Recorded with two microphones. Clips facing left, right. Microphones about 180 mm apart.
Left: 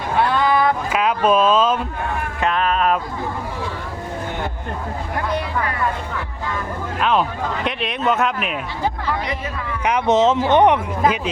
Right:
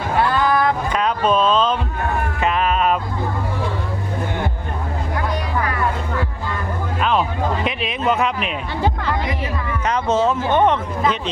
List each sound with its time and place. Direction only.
0.3 s music: centre (ahead or behind)
2.4 s music: 5° right (ahead or behind)
7.0 s music: centre (ahead or behind)
9.8 s speech: 15° left (ahead or behind)